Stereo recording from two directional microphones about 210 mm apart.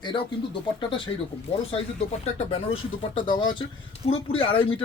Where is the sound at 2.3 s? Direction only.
30° left (ahead or behind).